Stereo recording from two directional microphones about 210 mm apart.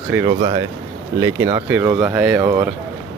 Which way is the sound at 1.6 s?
5° right (ahead or behind).